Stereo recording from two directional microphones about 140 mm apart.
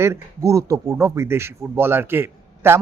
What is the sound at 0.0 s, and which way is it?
Speech, 20° right (ahead or behind).